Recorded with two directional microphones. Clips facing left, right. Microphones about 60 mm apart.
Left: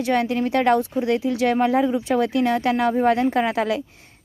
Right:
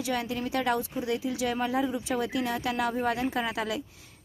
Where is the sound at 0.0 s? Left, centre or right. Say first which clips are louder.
Left 10 dB; left.